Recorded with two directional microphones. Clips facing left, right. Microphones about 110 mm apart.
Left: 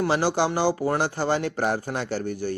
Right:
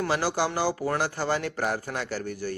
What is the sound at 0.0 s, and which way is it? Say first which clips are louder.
A man's voice: left 4 dB; 25° left (ahead or behind).